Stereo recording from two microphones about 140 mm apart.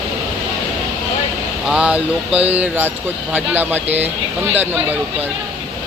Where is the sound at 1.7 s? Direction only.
10° right (ahead or behind).